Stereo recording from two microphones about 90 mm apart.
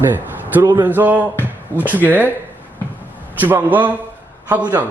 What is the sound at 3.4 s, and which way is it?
Speech, 20° right (ahead or behind).